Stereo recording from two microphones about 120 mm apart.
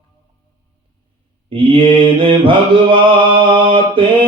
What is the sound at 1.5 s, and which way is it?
Mantra, 45° right (ahead or behind).